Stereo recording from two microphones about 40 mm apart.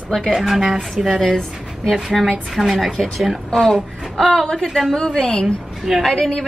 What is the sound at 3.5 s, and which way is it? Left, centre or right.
A woman's voice, centre.